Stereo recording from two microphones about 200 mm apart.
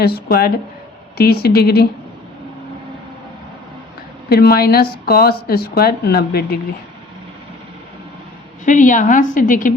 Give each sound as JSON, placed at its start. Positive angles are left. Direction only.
{"t": 0.0, "sound": "speech", "side_deg": 50}
{"t": 4.3, "sound": "speech", "side_deg": 50}
{"t": 8.6, "sound": "a woman's voice", "side_deg": 40}